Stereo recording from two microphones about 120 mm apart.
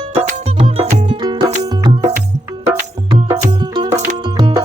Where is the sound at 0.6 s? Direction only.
55° right (ahead or behind).